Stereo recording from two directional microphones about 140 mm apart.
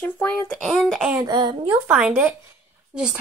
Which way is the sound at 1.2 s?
30° right (ahead or behind).